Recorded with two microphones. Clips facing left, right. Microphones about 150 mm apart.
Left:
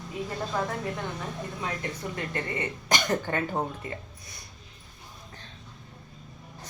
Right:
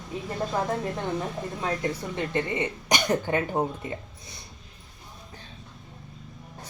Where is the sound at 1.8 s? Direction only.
25° right (ahead or behind).